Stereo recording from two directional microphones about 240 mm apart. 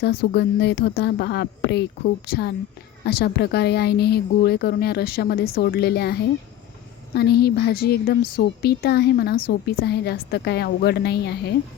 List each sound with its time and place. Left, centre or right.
0.0 s a woman's voice: left